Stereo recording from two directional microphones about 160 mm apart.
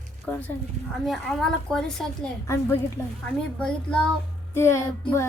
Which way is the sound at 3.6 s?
5° left (ahead or behind).